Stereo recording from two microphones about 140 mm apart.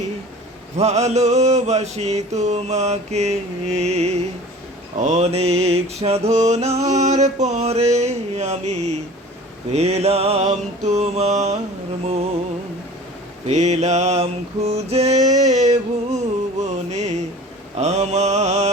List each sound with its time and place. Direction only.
0.8 s mantra: 50° right (ahead or behind)
13.5 s mantra: 55° right (ahead or behind)
15.4 s music: 55° right (ahead or behind)
17.7 s mantra: 55° right (ahead or behind)